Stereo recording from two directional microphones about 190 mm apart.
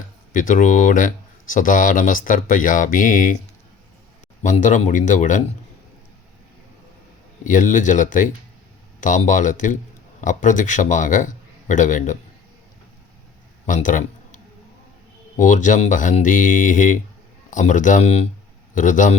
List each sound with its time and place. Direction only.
0.3 s speech: 45° left (ahead or behind)
4.4 s a man's voice: 40° left (ahead or behind)
7.4 s a man's voice: 45° left (ahead or behind)
13.7 s a man's voice: 45° left (ahead or behind)